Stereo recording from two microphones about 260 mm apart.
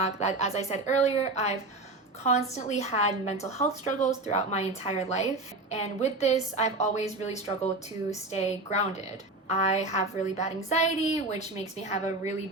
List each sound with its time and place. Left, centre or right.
0.0 s a woman's voice: left